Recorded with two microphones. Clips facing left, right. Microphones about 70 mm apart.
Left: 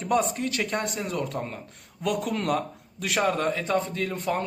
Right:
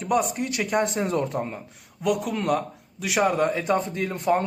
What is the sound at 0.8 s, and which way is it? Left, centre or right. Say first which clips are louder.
A man's voice: right 5 dB; right.